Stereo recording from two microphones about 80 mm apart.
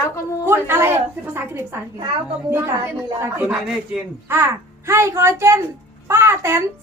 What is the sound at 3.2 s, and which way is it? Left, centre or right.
Speech, right.